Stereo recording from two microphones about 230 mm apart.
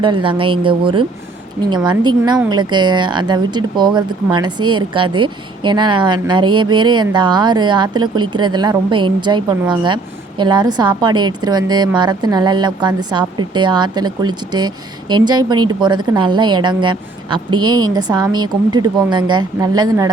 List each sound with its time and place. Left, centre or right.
0.0 s a woman's voice: right